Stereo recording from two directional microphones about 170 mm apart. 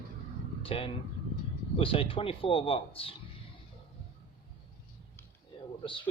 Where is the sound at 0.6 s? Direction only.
35° left (ahead or behind).